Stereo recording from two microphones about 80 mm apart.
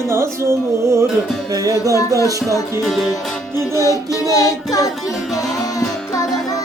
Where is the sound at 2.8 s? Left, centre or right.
Centre.